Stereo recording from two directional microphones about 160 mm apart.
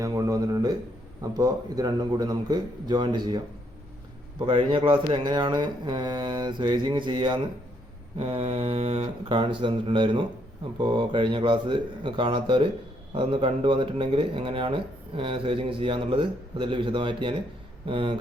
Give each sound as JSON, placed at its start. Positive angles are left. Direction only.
{"t": 0.0, "sound": "speech", "side_deg": -20}
{"t": 8.2, "sound": "speech", "side_deg": -40}